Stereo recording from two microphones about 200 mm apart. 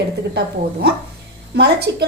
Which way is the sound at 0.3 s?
55° right (ahead or behind).